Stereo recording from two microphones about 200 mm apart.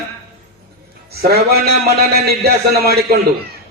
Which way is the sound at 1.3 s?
50° right (ahead or behind).